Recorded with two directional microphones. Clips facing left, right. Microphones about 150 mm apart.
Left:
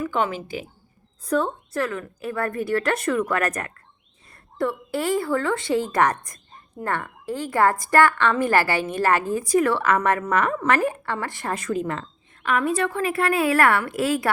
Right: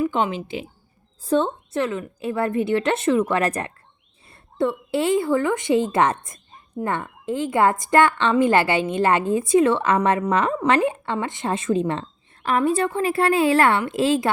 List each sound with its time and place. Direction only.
0.0 s a woman's voice: 25° right (ahead or behind)